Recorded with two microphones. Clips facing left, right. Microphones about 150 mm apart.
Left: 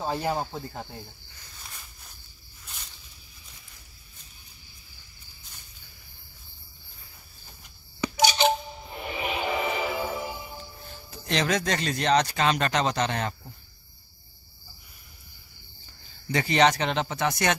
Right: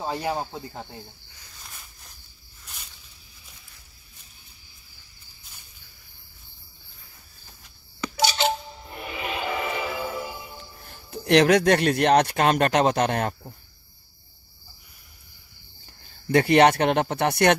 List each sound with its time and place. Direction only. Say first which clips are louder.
0.0 s speech: even; 10° right (ahead or behind)
8.0 s coin: left 1 dB; 20° left (ahead or behind)
11.1 s speech: right 9 dB; 60° right (ahead or behind)
16.3 s speech: right 5 dB; 55° right (ahead or behind)